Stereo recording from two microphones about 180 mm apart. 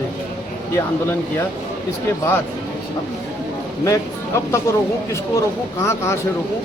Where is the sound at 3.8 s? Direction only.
15° left (ahead or behind).